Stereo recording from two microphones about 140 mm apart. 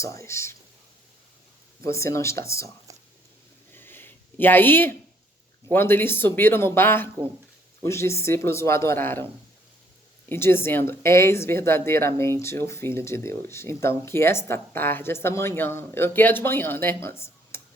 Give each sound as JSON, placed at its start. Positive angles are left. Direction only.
{"t": 0.0, "sound": "speech", "side_deg": 20}
{"t": 1.8, "sound": "speech", "side_deg": 20}
{"t": 2.9, "sound": "a sound", "side_deg": -25}
{"t": 3.7, "sound": "a sound", "side_deg": 15}
{"t": 5.7, "sound": "speech", "side_deg": 15}
{"t": 10.2, "sound": "speech", "side_deg": 15}